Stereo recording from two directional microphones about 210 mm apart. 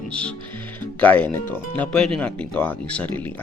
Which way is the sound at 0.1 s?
5° left (ahead or behind).